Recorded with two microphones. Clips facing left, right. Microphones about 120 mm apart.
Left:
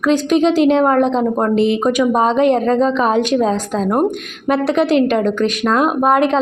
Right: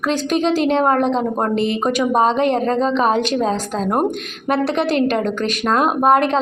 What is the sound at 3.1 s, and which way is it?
Speech, 15° left (ahead or behind).